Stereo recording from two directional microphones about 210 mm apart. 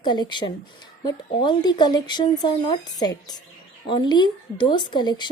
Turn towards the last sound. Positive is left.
turn(degrees=20)  # may be behind; listen again after turning